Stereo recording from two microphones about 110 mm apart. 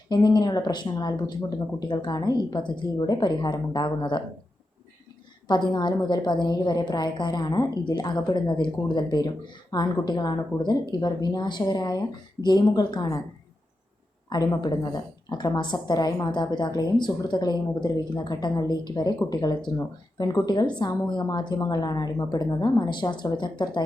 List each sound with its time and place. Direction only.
0.1 s a woman's voice: 40° left (ahead or behind)
5.5 s speech: 45° left (ahead or behind)
14.3 s speech: 35° left (ahead or behind)